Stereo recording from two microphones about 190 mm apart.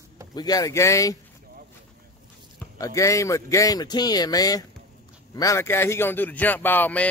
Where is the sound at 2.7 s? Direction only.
15° left (ahead or behind).